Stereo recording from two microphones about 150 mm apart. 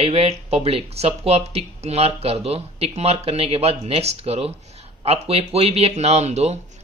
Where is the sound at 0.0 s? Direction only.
40° right (ahead or behind).